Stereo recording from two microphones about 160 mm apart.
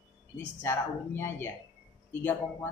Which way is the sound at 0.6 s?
15° left (ahead or behind).